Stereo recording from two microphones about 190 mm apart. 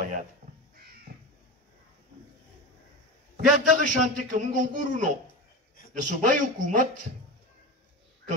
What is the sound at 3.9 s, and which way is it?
A woman's voice, 40° right (ahead or behind).